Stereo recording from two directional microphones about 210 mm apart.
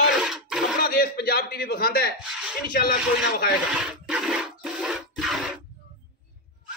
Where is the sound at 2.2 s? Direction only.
5° right (ahead or behind).